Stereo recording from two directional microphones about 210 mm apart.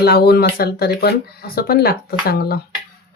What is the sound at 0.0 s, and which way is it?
Speech, 50° left (ahead or behind).